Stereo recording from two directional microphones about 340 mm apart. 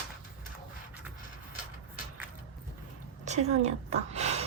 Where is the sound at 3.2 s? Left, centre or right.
Centre.